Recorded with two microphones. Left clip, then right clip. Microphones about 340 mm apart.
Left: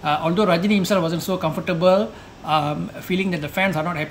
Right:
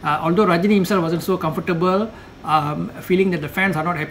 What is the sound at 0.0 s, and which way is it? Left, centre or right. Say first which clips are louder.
Speech: right 2 dB; centre.